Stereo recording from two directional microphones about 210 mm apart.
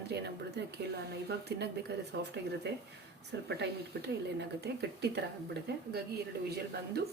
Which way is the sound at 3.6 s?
55° right (ahead or behind).